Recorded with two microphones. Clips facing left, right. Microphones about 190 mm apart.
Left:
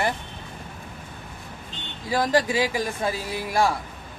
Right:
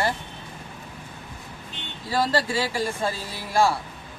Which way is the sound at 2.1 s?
15° left (ahead or behind).